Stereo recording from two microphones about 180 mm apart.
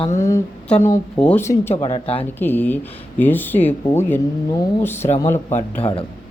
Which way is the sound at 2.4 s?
10° left (ahead or behind).